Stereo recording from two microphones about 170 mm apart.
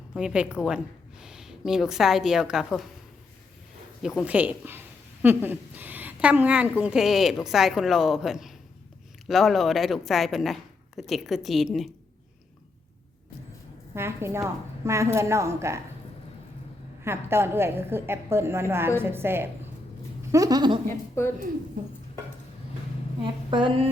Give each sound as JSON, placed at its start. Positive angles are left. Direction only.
{"t": 0.1, "sound": "a woman's voice", "side_deg": -5}
{"t": 4.0, "sound": "a woman's voice", "side_deg": -5}
{"t": 13.9, "sound": "a woman's voice", "side_deg": -15}
{"t": 17.0, "sound": "a woman's voice", "side_deg": -15}
{"t": 20.3, "sound": "a sound", "side_deg": -20}
{"t": 21.2, "sound": "a woman's voice", "side_deg": 15}
{"t": 23.2, "sound": "a sound", "side_deg": -30}